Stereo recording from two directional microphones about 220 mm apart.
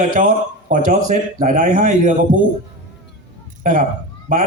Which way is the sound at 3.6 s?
35° right (ahead or behind).